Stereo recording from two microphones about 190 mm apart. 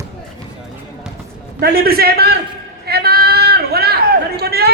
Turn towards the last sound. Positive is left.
turn(degrees=-55)  # may be behind; listen again after turning